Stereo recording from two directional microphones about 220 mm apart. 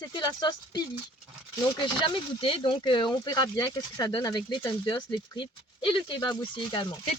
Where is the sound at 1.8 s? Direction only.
20° left (ahead or behind).